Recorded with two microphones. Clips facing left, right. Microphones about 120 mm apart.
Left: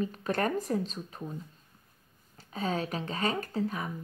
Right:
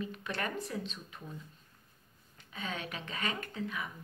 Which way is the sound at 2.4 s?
35° left (ahead or behind).